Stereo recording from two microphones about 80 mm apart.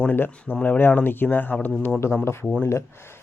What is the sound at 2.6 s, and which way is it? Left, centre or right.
Speech, left.